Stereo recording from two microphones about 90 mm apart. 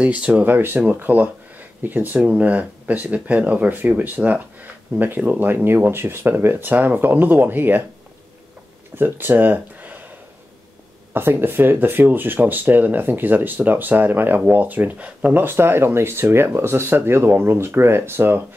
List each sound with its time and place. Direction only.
0.0 s speech: 15° right (ahead or behind)
8.9 s speech: 20° right (ahead or behind)
11.1 s speech: 25° right (ahead or behind)